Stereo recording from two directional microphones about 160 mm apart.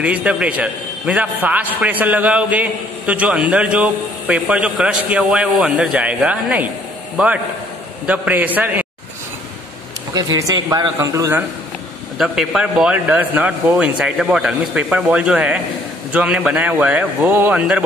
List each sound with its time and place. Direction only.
0.0 s a man's voice: 5° right (ahead or behind)
8.1 s a man's voice: 10° right (ahead or behind)
10.1 s a man's voice: 20° right (ahead or behind)
12.2 s a man's voice: 5° right (ahead or behind)